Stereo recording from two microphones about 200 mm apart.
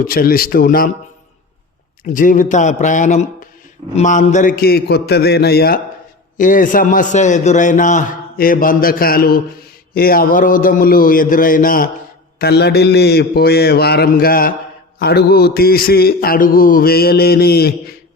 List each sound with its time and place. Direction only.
0.0 s mantra: 45° left (ahead or behind)
2.1 s a man's voice: 40° left (ahead or behind)
3.9 s mantra: 40° left (ahead or behind)
6.3 s a man's voice: 40° left (ahead or behind)
9.9 s mantra: 50° left (ahead or behind)